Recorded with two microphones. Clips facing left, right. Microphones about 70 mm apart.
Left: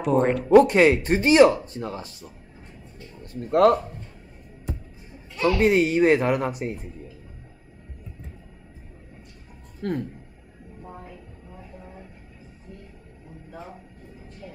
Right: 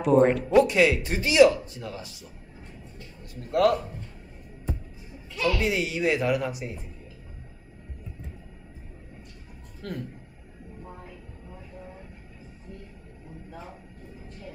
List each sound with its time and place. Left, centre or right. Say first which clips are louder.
0.0 s speech: right 2 dB; centre
0.5 s speech: left 5 dB; left
3.3 s speech: left 5 dB; left
5.4 s speech: left 6 dB; left
9.8 s speech: left 8 dB; left
14.4 s music: left 2 dB; centre